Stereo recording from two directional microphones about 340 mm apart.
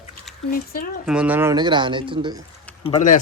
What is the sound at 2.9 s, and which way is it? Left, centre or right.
Speech, left.